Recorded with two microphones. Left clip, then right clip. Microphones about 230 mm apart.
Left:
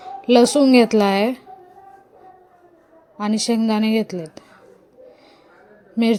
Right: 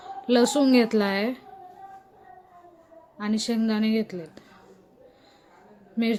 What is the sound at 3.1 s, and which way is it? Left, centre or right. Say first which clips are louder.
A woman's voice: left 7 dB; left.